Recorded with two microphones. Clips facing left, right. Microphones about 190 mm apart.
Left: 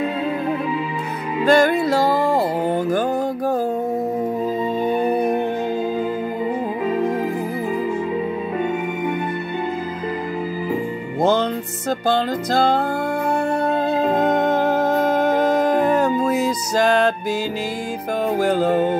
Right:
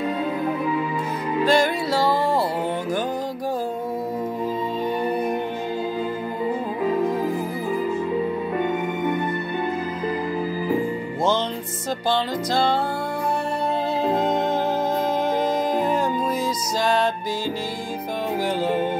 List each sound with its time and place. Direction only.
1.4 s music: 55° left (ahead or behind)
14.2 s music: 60° left (ahead or behind)